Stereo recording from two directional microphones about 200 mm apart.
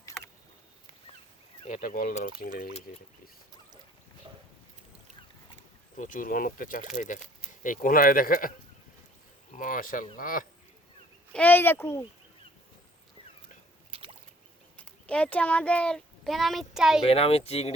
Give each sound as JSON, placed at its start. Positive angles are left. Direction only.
{"t": 1.6, "sound": "speech", "side_deg": 40}
{"t": 6.0, "sound": "speech", "side_deg": 40}
{"t": 9.6, "sound": "speech", "side_deg": 45}
{"t": 11.3, "sound": "speech", "side_deg": 5}
{"t": 13.9, "sound": "a sound", "side_deg": -25}
{"t": 15.0, "sound": "speech", "side_deg": 5}
{"t": 17.1, "sound": "speech", "side_deg": 30}